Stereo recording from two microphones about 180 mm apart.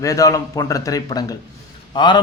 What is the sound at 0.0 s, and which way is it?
A man's voice, 20° left (ahead or behind).